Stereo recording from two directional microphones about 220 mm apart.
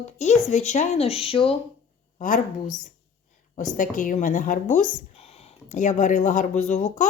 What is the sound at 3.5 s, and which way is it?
Speech, 35° left (ahead or behind).